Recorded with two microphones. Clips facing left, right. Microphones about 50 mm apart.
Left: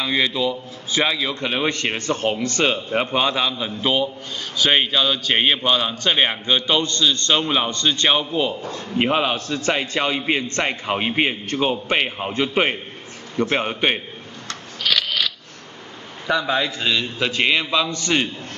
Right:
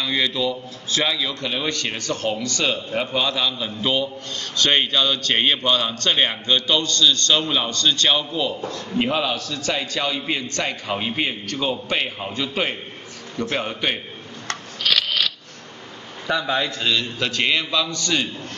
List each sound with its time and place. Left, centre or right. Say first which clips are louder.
0.0 s a man's voice: left 2 dB; centre
14.8 s a sound: even; centre
16.3 s a man's voice: left 2 dB; centre; by 18.3 s left